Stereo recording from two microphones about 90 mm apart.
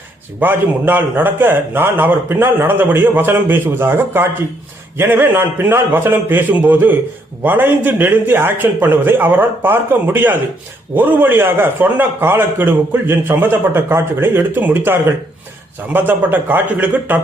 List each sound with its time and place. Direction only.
0.3 s a man's voice: 20° right (ahead or behind)